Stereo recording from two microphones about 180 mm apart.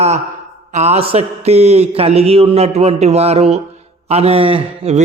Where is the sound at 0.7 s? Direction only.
40° right (ahead or behind).